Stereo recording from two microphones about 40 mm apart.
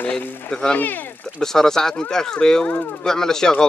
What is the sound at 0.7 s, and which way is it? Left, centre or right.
Speech, left.